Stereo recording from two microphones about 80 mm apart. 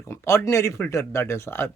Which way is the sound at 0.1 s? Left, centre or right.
Left.